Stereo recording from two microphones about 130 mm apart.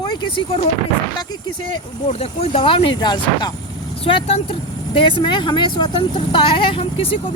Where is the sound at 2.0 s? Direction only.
50° left (ahead or behind); by 3.5 s 35° left (ahead or behind).